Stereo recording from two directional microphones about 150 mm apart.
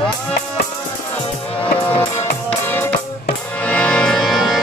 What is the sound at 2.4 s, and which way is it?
Music, 15° left (ahead or behind).